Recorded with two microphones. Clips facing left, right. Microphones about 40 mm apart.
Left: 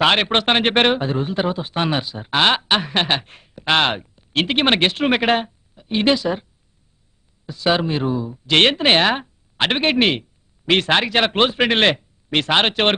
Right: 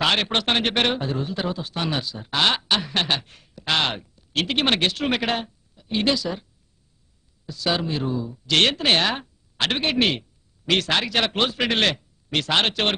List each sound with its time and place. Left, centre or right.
0.0 s a man's voice: left
7.4 s a man's voice: left